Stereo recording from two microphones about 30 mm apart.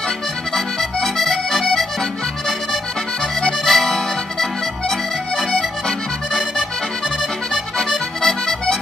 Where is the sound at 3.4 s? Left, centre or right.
Centre.